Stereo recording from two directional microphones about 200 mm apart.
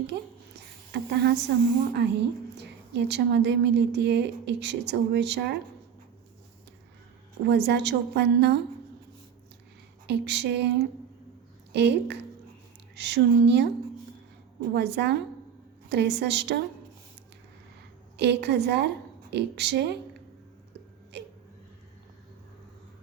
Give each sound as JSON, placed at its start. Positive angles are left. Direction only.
{"t": 1.1, "sound": "a woman's voice", "side_deg": -55}
{"t": 7.4, "sound": "a woman's voice", "side_deg": -55}
{"t": 10.1, "sound": "a woman's voice", "side_deg": -60}
{"t": 18.2, "sound": "a woman's voice", "side_deg": -55}